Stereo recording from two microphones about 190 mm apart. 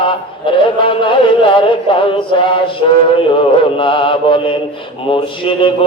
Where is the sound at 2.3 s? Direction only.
25° left (ahead or behind).